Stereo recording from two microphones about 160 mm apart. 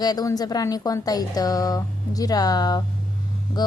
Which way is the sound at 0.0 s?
25° left (ahead or behind).